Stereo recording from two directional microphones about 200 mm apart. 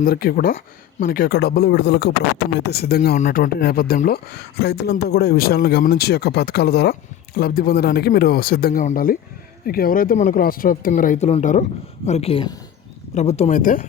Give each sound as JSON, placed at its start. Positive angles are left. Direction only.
{"t": 0.0, "sound": "speech", "side_deg": 50}
{"t": 3.2, "sound": "speech", "side_deg": 40}